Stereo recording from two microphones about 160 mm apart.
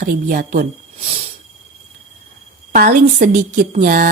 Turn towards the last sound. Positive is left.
turn(degrees=-55)  # may be behind; listen again after turning